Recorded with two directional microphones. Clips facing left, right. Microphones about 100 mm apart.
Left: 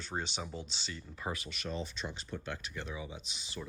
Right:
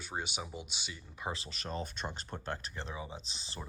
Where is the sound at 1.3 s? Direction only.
30° right (ahead or behind).